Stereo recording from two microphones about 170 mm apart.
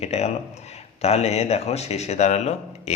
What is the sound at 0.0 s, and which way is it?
Speech, 40° left (ahead or behind).